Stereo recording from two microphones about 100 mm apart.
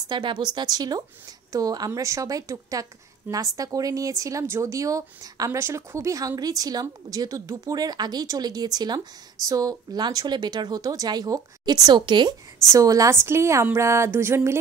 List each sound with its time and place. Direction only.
0.1 s a woman's voice: 50° right (ahead or behind)
12.7 s a woman's voice: 35° right (ahead or behind)